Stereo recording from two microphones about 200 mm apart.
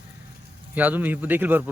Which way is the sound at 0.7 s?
10° right (ahead or behind).